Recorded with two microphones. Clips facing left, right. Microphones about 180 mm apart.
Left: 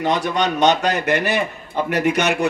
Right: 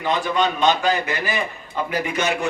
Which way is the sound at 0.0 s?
85° left.